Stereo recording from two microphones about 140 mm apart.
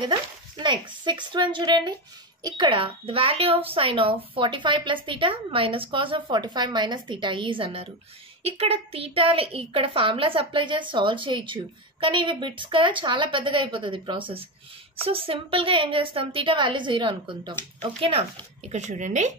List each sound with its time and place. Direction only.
0.0 s a child's voice: 30° right (ahead or behind)
18.7 s speech: 60° right (ahead or behind)